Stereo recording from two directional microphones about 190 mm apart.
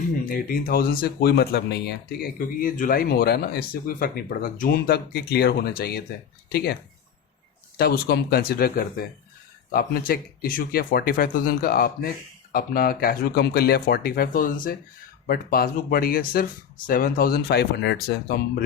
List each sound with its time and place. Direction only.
0.3 s speech: 50° left (ahead or behind)
7.8 s speech: 55° left (ahead or behind)